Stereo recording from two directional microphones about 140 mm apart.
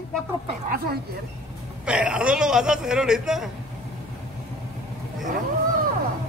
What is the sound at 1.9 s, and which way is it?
A man's voice, 5° right (ahead or behind).